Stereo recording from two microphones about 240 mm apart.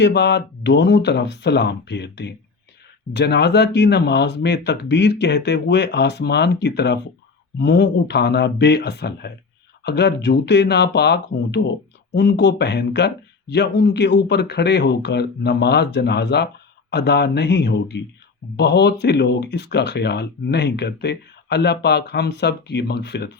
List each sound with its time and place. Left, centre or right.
0.0 s speech: left